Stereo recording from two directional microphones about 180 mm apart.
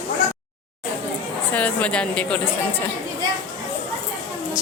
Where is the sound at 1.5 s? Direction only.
10° left (ahead or behind).